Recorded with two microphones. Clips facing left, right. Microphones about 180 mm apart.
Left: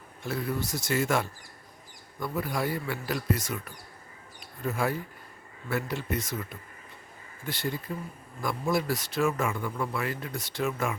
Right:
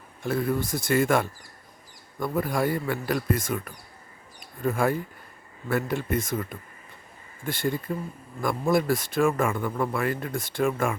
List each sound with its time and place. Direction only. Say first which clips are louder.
0.3 s speech: right 5 dB; 50° right (ahead or behind)
4.4 s a sound: right 5 dB; 50° right (ahead or behind)
5.6 s speech: right 5 dB; 50° right (ahead or behind)